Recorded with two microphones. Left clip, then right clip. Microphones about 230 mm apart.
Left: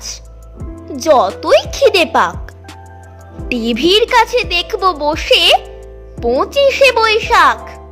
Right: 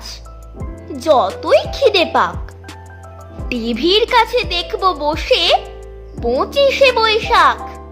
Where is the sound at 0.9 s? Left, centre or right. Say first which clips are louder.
Left 2 dB; left.